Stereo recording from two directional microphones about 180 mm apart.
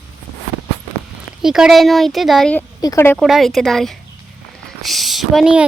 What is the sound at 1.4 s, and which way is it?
Speech, 5° right (ahead or behind).